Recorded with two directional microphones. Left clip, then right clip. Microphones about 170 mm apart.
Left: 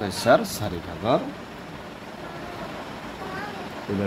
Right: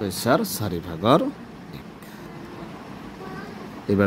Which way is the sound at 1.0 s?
55° right (ahead or behind).